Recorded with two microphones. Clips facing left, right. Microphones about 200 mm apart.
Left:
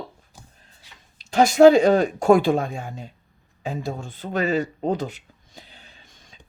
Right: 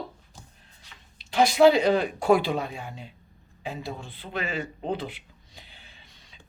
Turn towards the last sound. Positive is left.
turn(degrees=45)  # may be behind; listen again after turning